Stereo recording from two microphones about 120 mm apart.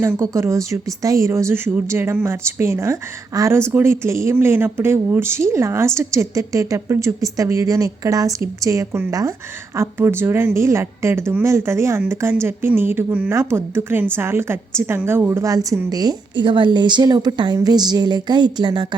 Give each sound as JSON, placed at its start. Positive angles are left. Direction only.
{"t": 0.0, "sound": "a woman's voice", "side_deg": -25}